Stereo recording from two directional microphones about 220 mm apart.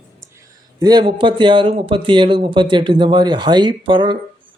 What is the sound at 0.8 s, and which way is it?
Speech, 20° right (ahead or behind).